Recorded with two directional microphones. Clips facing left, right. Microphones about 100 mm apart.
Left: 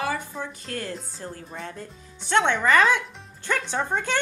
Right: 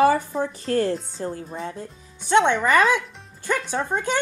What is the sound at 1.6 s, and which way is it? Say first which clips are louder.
Speech: right 4 dB; 20° right (ahead or behind).